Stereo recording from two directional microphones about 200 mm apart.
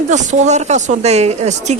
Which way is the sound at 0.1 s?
35° right (ahead or behind).